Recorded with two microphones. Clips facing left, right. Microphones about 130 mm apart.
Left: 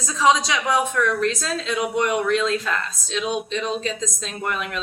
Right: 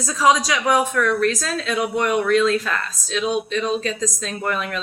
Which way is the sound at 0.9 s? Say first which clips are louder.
Right 2 dB; 25° left (ahead or behind).